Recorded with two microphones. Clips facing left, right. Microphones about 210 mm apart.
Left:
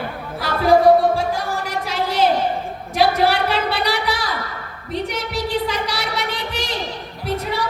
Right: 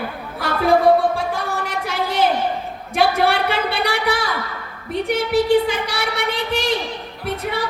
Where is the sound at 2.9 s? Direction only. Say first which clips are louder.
Even; 55° right (ahead or behind).